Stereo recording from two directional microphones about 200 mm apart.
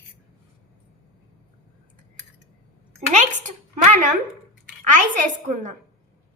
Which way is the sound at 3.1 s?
35° right (ahead or behind).